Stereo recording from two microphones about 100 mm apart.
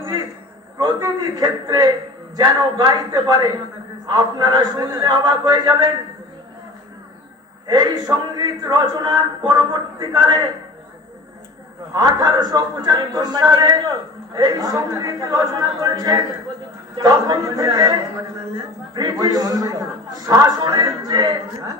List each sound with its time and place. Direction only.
0.8 s a man's voice: 35° right (ahead or behind)
7.7 s a man's voice: 40° right (ahead or behind)
11.9 s a man's voice: 40° right (ahead or behind)
18.5 s a man's voice: 45° right (ahead or behind)